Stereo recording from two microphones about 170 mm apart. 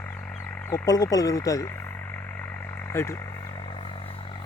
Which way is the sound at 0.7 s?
20° left (ahead or behind).